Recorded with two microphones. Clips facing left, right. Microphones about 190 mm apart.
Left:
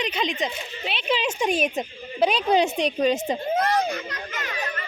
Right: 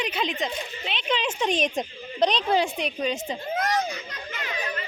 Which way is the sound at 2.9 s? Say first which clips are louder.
Left 6 dB; 45° left (ahead or behind).